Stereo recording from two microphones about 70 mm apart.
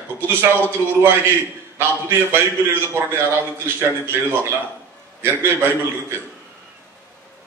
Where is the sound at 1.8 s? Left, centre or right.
Right.